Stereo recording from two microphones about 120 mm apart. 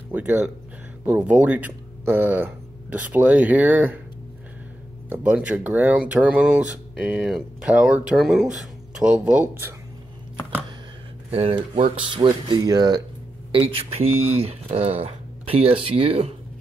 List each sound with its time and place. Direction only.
0.1 s speech: 15° right (ahead or behind)
5.1 s speech: 10° right (ahead or behind)
11.2 s speech: 50° right (ahead or behind)
12.6 s speech: 35° right (ahead or behind)
13.5 s speech: 50° right (ahead or behind)